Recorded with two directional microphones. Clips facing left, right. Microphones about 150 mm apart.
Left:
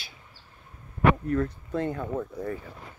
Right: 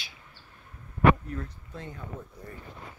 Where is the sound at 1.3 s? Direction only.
65° left (ahead or behind).